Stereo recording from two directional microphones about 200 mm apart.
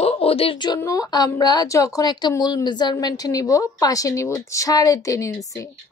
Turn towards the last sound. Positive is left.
turn(degrees=15)  # may be behind; listen again after turning